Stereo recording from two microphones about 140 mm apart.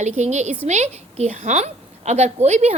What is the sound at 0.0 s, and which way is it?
A woman's voice, 55° right (ahead or behind).